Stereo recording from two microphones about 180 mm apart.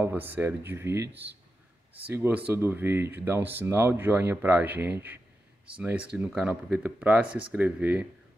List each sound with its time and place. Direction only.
0.0 s speech: 10° right (ahead or behind)